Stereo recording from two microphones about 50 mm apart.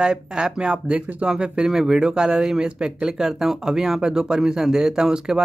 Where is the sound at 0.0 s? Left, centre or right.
Centre.